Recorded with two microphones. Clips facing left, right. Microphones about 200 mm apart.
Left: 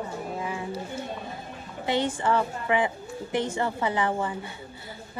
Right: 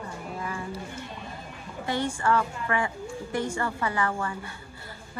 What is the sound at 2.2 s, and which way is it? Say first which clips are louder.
A woman's voice: even; 20° left (ahead or behind).